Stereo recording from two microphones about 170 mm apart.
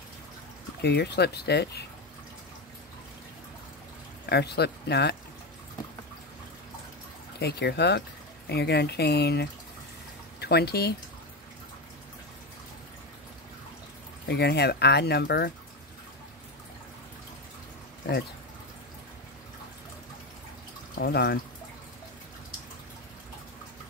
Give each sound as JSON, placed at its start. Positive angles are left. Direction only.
{"t": 0.8, "sound": "speech", "side_deg": 75}
{"t": 4.3, "sound": "speech", "side_deg": 75}
{"t": 7.3, "sound": "speech", "side_deg": 75}
{"t": 14.2, "sound": "speech", "side_deg": 75}
{"t": 21.0, "sound": "speech", "side_deg": 70}